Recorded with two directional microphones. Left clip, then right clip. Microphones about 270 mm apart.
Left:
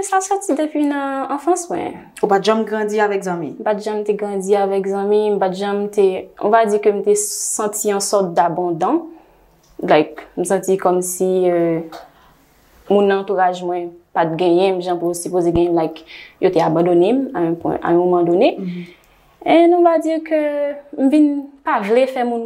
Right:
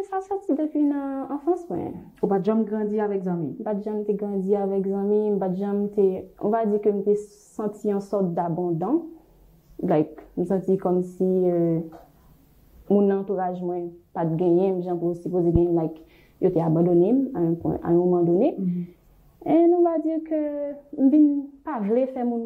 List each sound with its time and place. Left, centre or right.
0.0 s speech: centre